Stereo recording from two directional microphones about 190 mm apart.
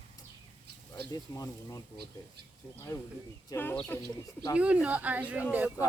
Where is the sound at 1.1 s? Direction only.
20° left (ahead or behind).